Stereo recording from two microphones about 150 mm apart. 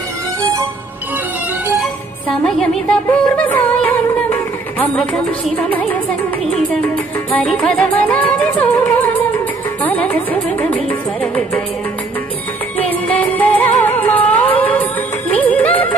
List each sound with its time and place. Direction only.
0.4 s music: 20° right (ahead or behind)
1.8 s music: 5° left (ahead or behind)
12.7 s music: 10° left (ahead or behind)